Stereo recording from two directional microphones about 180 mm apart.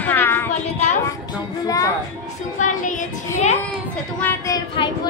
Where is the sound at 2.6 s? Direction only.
45° left (ahead or behind).